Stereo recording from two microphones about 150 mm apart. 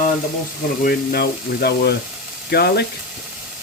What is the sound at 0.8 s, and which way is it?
Speech, 90° left.